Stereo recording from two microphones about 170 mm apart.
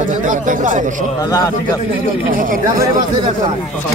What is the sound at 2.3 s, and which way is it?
Speech, 55° right (ahead or behind).